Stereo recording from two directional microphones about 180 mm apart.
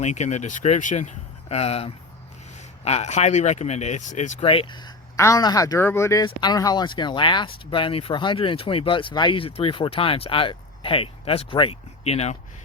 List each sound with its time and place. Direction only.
0.0 s speech: 40° left (ahead or behind)
4.4 s speech: 30° left (ahead or behind)